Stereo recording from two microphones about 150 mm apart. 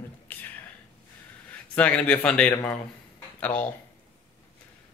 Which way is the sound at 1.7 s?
10° left (ahead or behind).